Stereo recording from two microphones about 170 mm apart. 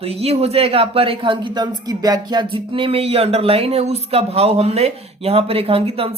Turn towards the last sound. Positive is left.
turn(degrees=-35)  # may be behind; listen again after turning